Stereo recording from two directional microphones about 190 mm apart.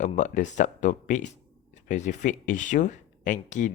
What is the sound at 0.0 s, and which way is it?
Speech, 40° left (ahead or behind).